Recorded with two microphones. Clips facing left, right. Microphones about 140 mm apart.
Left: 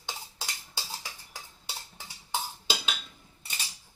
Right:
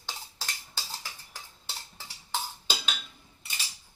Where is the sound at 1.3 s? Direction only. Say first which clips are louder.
Left 1 dB; 15° left (ahead or behind).